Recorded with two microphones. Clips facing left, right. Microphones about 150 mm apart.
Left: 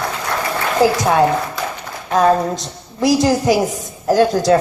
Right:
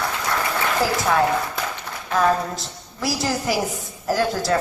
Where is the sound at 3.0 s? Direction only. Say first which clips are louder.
Left 10 dB; 20° left (ahead or behind).